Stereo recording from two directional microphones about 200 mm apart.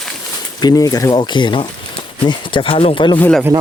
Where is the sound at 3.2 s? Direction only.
5° left (ahead or behind).